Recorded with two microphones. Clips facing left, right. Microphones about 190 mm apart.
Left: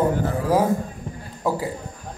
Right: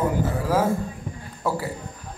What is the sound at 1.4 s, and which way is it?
Speech, 15° left (ahead or behind).